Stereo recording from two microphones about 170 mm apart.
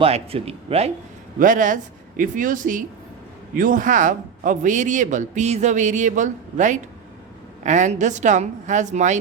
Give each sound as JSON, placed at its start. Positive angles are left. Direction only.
{"t": 0.0, "sound": "a man's voice", "side_deg": -35}
{"t": 1.4, "sound": "speech", "side_deg": -50}